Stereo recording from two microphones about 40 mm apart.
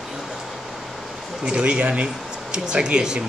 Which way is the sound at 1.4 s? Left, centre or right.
Right.